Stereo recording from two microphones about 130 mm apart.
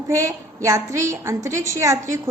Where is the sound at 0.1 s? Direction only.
25° right (ahead or behind).